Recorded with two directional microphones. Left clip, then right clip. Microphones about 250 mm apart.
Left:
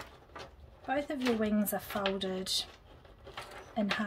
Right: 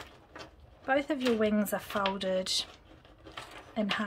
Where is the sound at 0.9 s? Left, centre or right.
Centre.